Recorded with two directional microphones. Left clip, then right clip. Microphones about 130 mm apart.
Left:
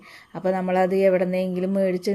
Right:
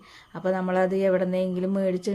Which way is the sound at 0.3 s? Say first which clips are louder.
Left 3 dB; 25° left (ahead or behind).